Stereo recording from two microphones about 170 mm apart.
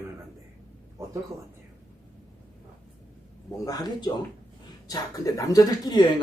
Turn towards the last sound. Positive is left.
turn(degrees=25)  # may be behind; listen again after turning